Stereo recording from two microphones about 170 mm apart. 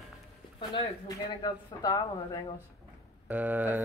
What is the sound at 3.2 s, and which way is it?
Speech, 10° right (ahead or behind).